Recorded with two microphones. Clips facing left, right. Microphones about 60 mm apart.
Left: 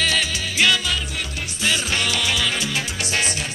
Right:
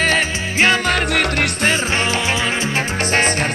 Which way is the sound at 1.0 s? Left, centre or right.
Right.